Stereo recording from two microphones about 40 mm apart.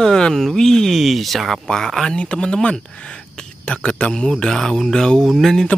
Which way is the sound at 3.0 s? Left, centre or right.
Left.